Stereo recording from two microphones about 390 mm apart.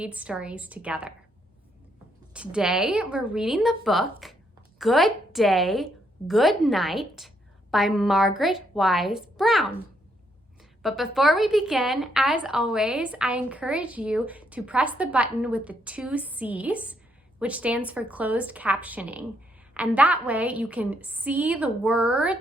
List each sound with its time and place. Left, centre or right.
0.0 s a woman's voice: centre
2.3 s a woman's voice: centre